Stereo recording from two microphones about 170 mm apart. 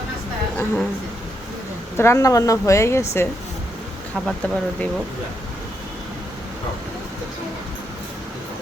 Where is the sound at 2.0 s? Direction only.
20° left (ahead or behind).